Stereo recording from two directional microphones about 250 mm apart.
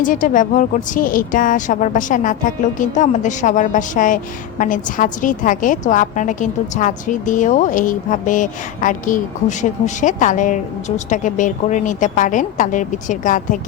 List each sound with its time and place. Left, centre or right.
0.0 s a woman's voice: left